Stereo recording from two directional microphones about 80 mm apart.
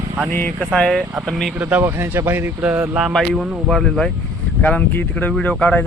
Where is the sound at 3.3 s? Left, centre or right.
Centre.